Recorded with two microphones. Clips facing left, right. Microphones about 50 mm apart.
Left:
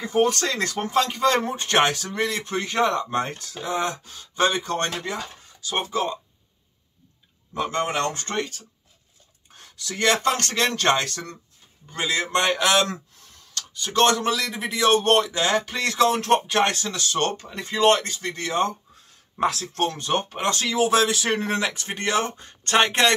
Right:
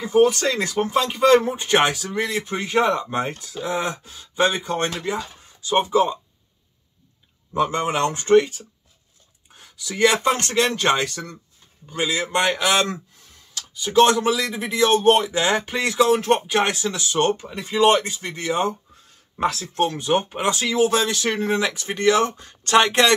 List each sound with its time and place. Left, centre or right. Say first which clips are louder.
0.2 s speech: right 3 dB; centre
5.8 s speech: right 7 dB; centre
7.5 s speech: right 3 dB; centre
15.2 s speech: right 2 dB; right
19.3 s speech: right 2 dB; centre
21.9 s speech: right 8 dB; left